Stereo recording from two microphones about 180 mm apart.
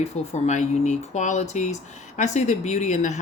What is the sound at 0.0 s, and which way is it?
Speech, 40° left (ahead or behind).